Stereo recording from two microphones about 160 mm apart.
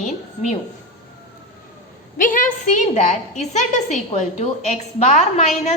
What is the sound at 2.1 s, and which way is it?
A woman's voice, 55° left (ahead or behind).